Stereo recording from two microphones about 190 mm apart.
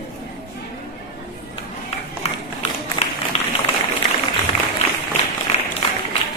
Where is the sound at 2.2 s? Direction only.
35° left (ahead or behind).